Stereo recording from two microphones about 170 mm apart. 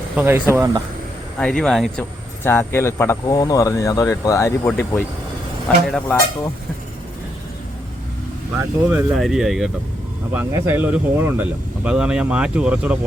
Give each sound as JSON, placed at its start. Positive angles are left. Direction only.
{"t": 0.2, "sound": "speech", "side_deg": -15}
{"t": 1.4, "sound": "speech", "side_deg": 5}
{"t": 2.4, "sound": "speech", "side_deg": 15}
{"t": 5.6, "sound": "speech", "side_deg": 5}
{"t": 8.5, "sound": "speech", "side_deg": -10}
{"t": 9.1, "sound": "speech", "side_deg": 0}